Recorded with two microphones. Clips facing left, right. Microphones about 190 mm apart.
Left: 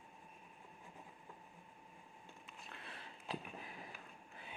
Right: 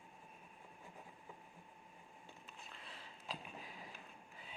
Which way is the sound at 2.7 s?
60° left (ahead or behind).